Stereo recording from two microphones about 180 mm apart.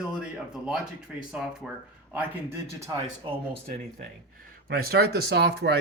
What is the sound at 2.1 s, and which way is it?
Speech, 15° right (ahead or behind).